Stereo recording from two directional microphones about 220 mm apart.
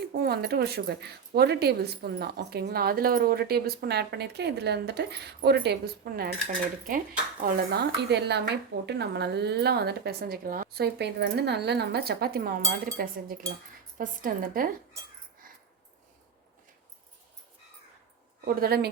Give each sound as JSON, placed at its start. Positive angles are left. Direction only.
{"t": 0.2, "sound": "a woman's voice", "side_deg": -45}
{"t": 18.4, "sound": "speech", "side_deg": -45}